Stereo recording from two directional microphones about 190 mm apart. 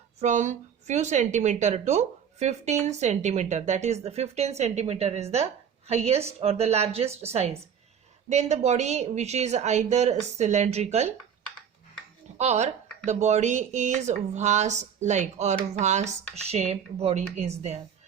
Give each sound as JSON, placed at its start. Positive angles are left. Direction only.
{"t": 0.2, "sound": "speech", "side_deg": -40}
{"t": 12.4, "sound": "speech", "side_deg": -35}